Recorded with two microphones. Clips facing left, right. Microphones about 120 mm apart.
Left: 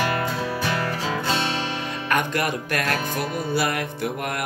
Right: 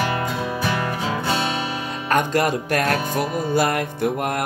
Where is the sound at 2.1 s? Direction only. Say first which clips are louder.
Right 5 dB; 40° right (ahead or behind).